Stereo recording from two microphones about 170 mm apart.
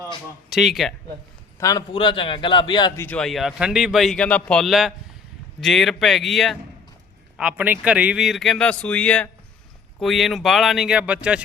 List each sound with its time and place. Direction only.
0.5 s a man's voice: centre (ahead or behind)
1.5 s a man's voice: 20° left (ahead or behind)
3.0 s a man's voice: 5° left (ahead or behind)